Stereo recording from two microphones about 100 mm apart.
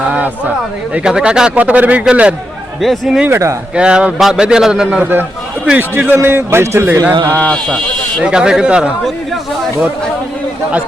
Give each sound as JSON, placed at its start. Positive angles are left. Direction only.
{"t": 0.1, "sound": "a man's voice", "side_deg": -15}
{"t": 2.8, "sound": "speech", "side_deg": 0}
{"t": 3.2, "sound": "a man's voice", "side_deg": -25}
{"t": 3.8, "sound": "a man's voice", "side_deg": -10}
{"t": 5.7, "sound": "a man's voice", "side_deg": -20}
{"t": 7.3, "sound": "speech", "side_deg": 10}
{"t": 8.2, "sound": "a man's voice", "side_deg": -10}